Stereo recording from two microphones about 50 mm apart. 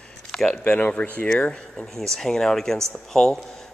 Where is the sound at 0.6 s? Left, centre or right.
Left.